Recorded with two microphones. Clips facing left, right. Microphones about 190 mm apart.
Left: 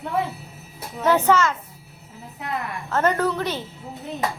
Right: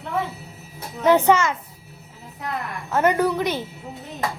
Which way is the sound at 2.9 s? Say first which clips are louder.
Right 2 dB; 15° right (ahead or behind).